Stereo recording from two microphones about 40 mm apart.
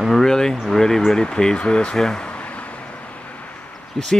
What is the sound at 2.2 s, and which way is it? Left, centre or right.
Vehicle, left.